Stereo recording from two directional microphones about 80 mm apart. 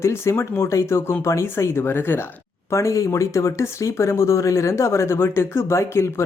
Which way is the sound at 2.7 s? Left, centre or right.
Left.